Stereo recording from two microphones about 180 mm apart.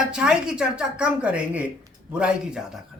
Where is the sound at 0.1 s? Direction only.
5° right (ahead or behind).